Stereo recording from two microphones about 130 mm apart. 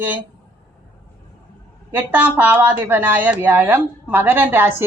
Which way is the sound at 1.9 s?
15° right (ahead or behind).